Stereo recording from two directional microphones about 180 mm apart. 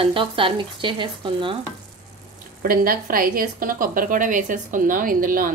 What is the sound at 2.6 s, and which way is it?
A woman's voice, 55° right (ahead or behind).